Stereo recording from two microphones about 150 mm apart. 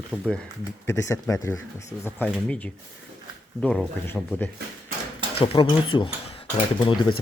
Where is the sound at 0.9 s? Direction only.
20° left (ahead or behind).